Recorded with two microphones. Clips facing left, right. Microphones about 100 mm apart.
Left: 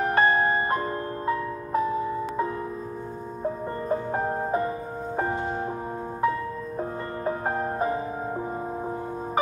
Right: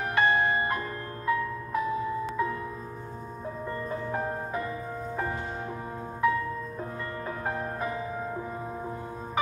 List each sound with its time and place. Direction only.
0.0 s music: 35° left (ahead or behind)
3.9 s music: 35° left (ahead or behind)